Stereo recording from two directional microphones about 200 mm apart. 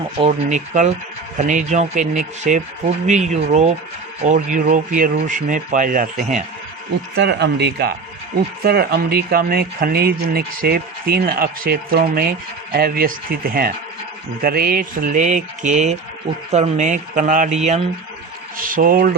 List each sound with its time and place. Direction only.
0.2 s speech: 35° right (ahead or behind)
7.2 s speech: 60° right (ahead or behind)